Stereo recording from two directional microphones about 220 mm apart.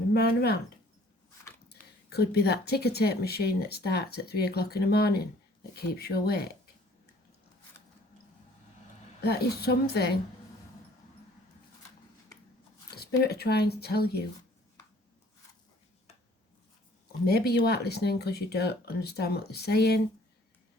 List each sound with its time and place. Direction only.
0.1 s speech: 45° left (ahead or behind)
1.7 s speech: 45° left (ahead or behind)
9.2 s speech: 45° left (ahead or behind)
13.0 s speech: 45° left (ahead or behind)
17.2 s speech: 45° left (ahead or behind)